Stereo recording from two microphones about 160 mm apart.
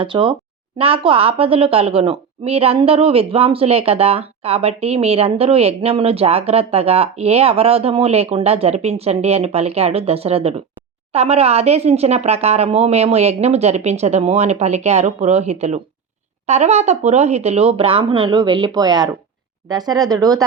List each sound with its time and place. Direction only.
0.0 s a woman's voice: 30° right (ahead or behind)